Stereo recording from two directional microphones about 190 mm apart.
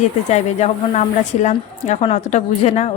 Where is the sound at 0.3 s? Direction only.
35° left (ahead or behind).